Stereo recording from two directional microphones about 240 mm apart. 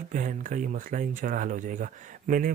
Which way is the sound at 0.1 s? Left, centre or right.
Right.